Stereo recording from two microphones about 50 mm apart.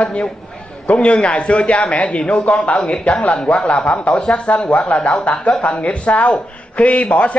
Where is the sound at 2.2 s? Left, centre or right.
Centre.